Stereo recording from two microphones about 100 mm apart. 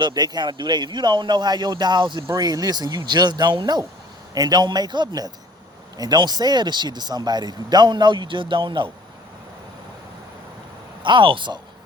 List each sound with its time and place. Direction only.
0.0 s speech: 45° right (ahead or behind)
2.3 s speech: 40° right (ahead or behind)
11.0 s speech: 55° right (ahead or behind)